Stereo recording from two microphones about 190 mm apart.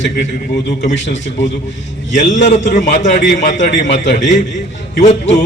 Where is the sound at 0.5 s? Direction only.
55° left (ahead or behind).